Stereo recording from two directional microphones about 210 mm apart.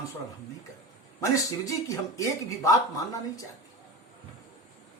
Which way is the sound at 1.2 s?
15° left (ahead or behind).